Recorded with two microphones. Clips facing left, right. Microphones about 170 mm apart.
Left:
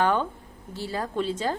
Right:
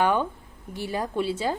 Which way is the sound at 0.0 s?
10° right (ahead or behind).